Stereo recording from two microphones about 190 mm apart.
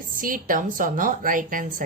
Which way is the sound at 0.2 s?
45° right (ahead or behind).